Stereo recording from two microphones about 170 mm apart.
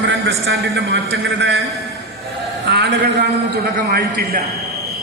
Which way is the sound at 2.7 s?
90° right.